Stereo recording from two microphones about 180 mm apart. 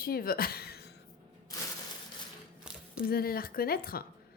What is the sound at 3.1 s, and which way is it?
Speech, 55° left (ahead or behind).